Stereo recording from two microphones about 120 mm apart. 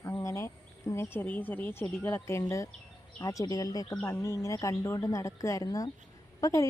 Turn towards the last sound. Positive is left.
turn(degrees=30)  # may be behind; listen again after turning